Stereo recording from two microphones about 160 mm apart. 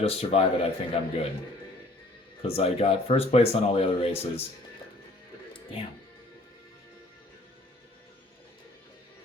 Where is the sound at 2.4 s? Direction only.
40° left (ahead or behind).